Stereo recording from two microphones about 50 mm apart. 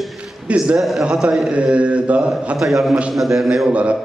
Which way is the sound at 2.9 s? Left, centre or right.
Centre.